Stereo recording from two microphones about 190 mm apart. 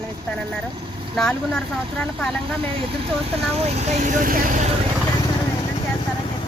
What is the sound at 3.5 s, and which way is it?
Speech, 35° right (ahead or behind).